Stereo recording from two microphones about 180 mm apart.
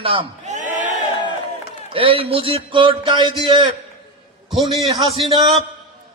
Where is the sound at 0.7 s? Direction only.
45° right (ahead or behind).